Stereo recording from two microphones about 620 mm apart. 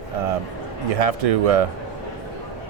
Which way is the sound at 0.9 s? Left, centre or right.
Right.